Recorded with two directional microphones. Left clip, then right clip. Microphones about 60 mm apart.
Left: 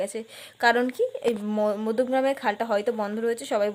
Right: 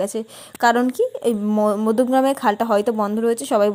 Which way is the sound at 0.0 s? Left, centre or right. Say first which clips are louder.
Right 6 dB; right.